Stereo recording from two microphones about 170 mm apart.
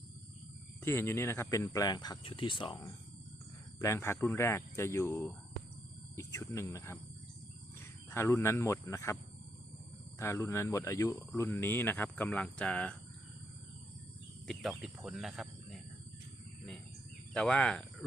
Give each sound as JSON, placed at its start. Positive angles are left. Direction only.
{"t": 0.8, "sound": "speech", "side_deg": 15}
{"t": 3.8, "sound": "speech", "side_deg": 15}
{"t": 10.2, "sound": "speech", "side_deg": 15}
{"t": 14.4, "sound": "speech", "side_deg": 0}
{"t": 17.3, "sound": "speech", "side_deg": 5}